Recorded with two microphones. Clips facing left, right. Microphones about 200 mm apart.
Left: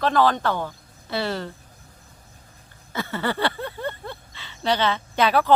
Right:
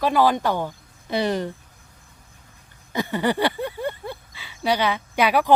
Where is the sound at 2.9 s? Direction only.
15° right (ahead or behind).